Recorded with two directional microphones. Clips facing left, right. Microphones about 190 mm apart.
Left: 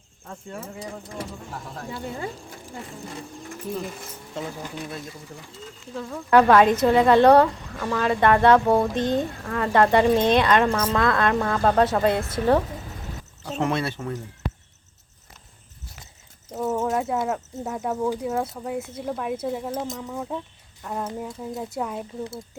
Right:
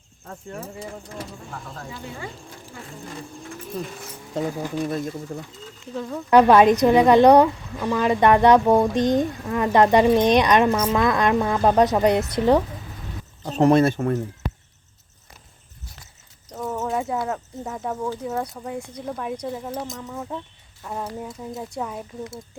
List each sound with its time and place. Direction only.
0.3 s speech: 5° right (ahead or behind)
4.4 s speech: 40° right (ahead or behind)
5.9 s speech: 5° right (ahead or behind)
6.3 s a woman's voice: 15° right (ahead or behind)
13.4 s speech: 40° right (ahead or behind)
16.5 s speech: 5° left (ahead or behind)